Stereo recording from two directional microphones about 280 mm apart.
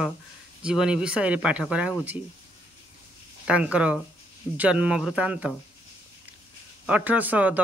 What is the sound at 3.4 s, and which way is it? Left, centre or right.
Speech, centre.